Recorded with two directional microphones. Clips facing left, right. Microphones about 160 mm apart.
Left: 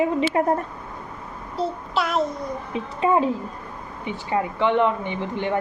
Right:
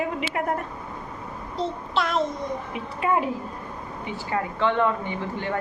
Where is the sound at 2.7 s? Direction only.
25° left (ahead or behind).